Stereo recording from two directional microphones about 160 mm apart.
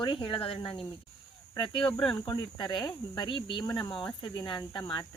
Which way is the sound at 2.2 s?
25° left (ahead or behind).